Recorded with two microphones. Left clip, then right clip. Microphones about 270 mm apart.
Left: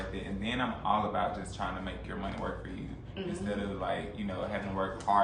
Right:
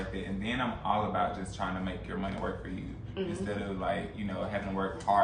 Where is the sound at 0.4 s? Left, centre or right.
Centre.